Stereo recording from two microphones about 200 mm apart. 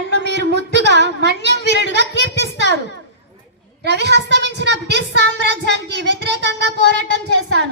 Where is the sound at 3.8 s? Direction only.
55° right (ahead or behind).